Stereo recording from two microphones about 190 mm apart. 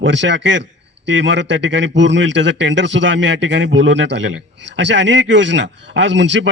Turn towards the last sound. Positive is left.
turn(degrees=-70)  # may be behind; listen again after turning